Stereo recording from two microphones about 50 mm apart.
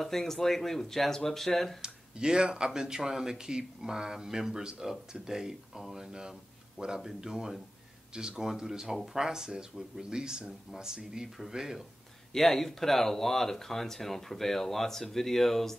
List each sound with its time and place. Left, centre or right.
0.0 s speech: centre
1.8 s speech: centre
12.3 s speech: centre